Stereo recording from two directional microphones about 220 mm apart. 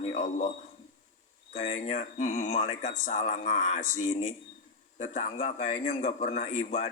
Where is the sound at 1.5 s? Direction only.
30° left (ahead or behind).